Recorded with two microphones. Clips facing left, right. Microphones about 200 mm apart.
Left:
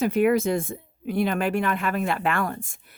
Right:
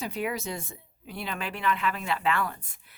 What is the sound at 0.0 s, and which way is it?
Speech, 55° left (ahead or behind).